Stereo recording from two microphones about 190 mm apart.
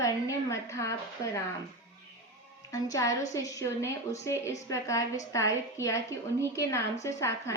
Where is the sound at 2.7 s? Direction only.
15° left (ahead or behind).